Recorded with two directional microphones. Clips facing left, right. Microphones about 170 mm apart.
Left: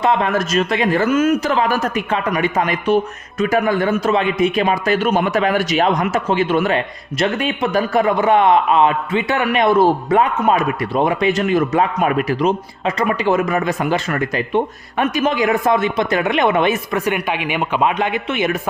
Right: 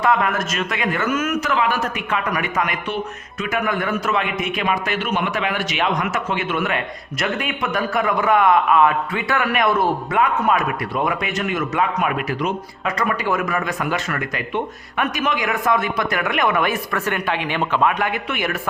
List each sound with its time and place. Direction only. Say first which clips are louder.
0.0 s speech: left 2 dB; 25° left (ahead or behind)